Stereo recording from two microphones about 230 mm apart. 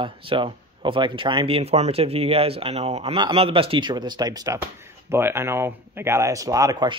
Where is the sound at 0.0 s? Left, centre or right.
Right.